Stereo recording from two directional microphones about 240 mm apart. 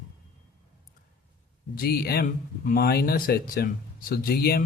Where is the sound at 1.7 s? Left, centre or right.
Left.